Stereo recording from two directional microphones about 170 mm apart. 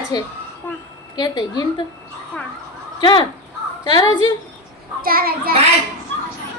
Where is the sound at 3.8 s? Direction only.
20° left (ahead or behind).